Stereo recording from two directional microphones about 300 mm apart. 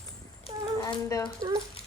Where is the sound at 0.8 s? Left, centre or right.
Centre.